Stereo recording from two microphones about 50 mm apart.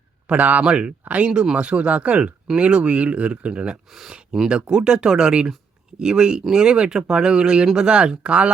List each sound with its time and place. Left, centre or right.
0.3 s speech: right
3.8 s speech: centre
4.1 s a sound: centre
4.4 s speech: centre